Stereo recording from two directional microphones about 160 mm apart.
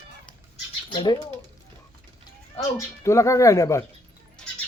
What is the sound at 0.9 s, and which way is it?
Speech, 30° left (ahead or behind).